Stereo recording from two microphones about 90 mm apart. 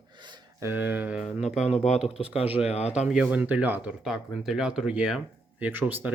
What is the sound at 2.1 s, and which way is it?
Speech, 90° left.